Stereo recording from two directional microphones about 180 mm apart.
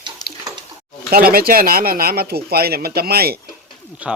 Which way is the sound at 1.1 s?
55° right (ahead or behind).